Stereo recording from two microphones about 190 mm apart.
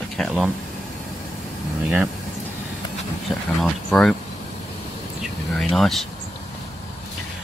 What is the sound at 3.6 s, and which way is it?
Speech, 5° left (ahead or behind).